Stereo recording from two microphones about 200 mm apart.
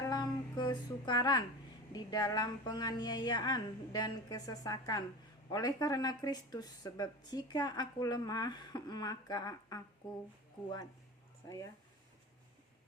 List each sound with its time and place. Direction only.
0.1 s music: 20° left (ahead or behind)
1.9 s speech: 20° left (ahead or behind)
11.4 s speech: 15° left (ahead or behind)